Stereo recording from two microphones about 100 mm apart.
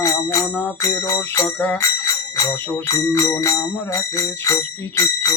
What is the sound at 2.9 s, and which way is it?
Jingle bell, 35° left (ahead or behind).